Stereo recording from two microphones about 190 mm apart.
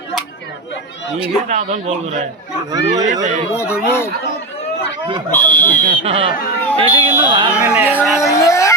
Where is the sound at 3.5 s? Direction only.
15° left (ahead or behind).